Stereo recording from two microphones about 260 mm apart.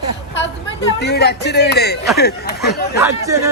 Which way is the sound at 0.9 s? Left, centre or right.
Left.